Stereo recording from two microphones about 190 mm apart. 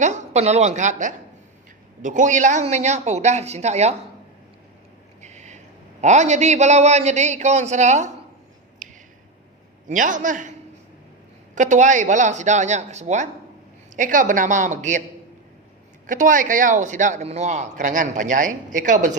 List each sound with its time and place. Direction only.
0.0 s a woman's voice: 35° right (ahead or behind)
5.2 s a sound: 40° right (ahead or behind)
6.0 s speech: 40° right (ahead or behind)
8.8 s a sound: 40° right (ahead or behind)
9.9 s a man's voice: 45° right (ahead or behind)
11.5 s speech: 40° right (ahead or behind)
16.0 s speech: 45° right (ahead or behind)